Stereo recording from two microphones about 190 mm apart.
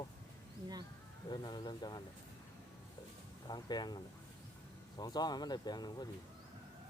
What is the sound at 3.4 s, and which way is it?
Speech, 20° left (ahead or behind).